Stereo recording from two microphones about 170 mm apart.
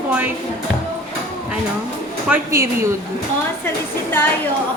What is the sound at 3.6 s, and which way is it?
Speech, 15° left (ahead or behind).